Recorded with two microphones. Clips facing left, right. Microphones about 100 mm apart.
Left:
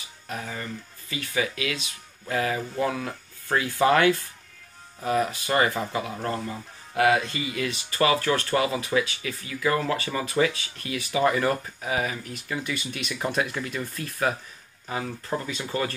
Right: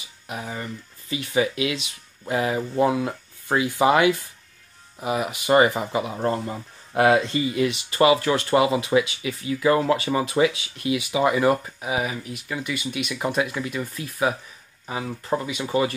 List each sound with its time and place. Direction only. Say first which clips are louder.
0.3 s speech: right 2 dB; 20° right (ahead or behind)